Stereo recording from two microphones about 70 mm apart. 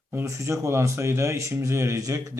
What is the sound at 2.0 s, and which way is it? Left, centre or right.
Speech, right.